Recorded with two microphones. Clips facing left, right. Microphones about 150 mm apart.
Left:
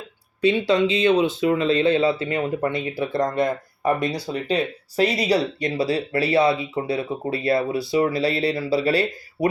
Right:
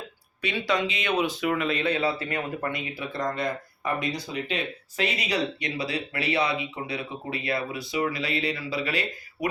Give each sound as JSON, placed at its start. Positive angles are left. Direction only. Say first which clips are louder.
{"t": 0.4, "sound": "speech", "louder": "left 8 dB", "side_deg": 25}